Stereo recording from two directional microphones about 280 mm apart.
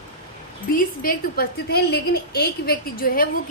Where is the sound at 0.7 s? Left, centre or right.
Left.